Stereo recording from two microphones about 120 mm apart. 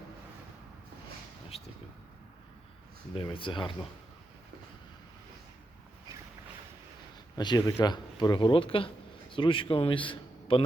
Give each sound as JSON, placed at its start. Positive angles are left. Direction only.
{"t": 3.2, "sound": "speech", "side_deg": 45}
{"t": 7.3, "sound": "a man's voice", "side_deg": 35}